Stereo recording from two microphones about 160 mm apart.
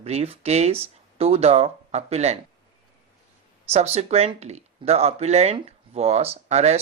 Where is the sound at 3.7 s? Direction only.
40° right (ahead or behind).